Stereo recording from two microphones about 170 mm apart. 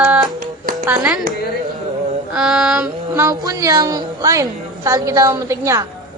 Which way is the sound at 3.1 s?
20° right (ahead or behind).